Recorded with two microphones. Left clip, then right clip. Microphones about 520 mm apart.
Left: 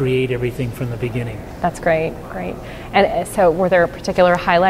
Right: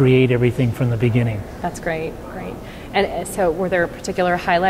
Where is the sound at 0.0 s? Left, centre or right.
Right.